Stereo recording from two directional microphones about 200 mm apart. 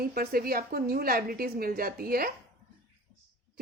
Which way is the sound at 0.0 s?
50° right (ahead or behind).